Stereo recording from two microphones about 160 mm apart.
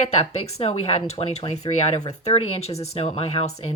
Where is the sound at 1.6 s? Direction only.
25° left (ahead or behind).